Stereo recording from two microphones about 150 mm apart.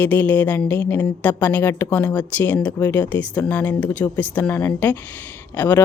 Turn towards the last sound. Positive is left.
turn(degrees=15)  # may be behind; listen again after turning